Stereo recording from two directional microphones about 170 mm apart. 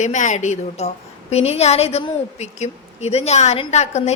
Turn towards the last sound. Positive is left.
turn(degrees=40)  # may be behind; listen again after turning